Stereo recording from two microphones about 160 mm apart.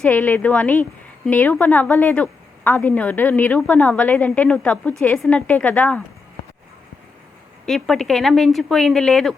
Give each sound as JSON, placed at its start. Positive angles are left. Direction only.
{"t": 0.0, "sound": "a woman's voice", "side_deg": 10}
{"t": 7.6, "sound": "speech", "side_deg": 5}